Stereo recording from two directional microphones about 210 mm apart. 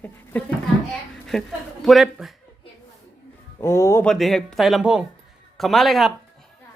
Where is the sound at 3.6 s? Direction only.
15° left (ahead or behind).